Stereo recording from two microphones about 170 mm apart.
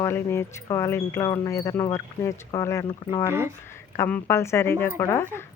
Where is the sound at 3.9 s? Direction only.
15° left (ahead or behind).